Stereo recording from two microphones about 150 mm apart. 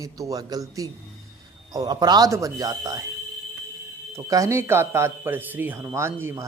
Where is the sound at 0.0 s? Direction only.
25° right (ahead or behind).